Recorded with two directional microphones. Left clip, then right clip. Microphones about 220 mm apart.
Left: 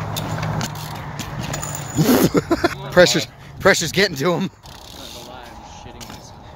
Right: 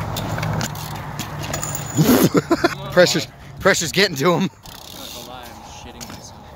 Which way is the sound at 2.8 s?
20° left (ahead or behind).